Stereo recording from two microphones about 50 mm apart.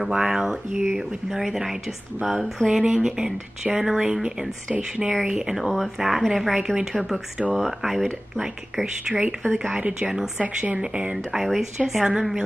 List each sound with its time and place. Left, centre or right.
0.1 s speech: centre
2.2 s speech: centre
2.7 s speech: centre
5.3 s speech: centre
6.5 s speech: centre
9.9 s speech: centre
10.4 s speech: right
11.3 s speech: centre